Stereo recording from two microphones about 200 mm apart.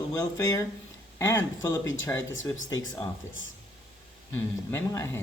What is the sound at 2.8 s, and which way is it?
Speech, 85° left.